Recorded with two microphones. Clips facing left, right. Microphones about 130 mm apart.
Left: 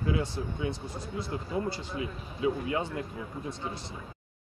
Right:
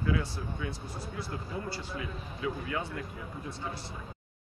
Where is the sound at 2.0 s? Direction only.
25° left (ahead or behind).